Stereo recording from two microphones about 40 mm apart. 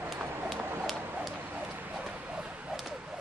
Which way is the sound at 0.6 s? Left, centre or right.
Right.